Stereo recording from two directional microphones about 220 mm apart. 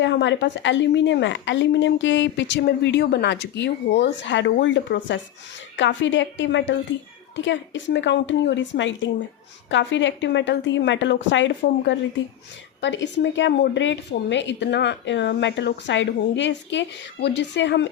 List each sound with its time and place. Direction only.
0.0 s a woman's voice: 55° left (ahead or behind)